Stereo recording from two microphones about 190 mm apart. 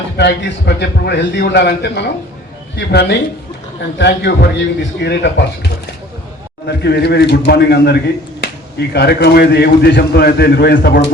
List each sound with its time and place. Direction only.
0.2 s speech: 60° left (ahead or behind)
6.7 s speech: 60° left (ahead or behind)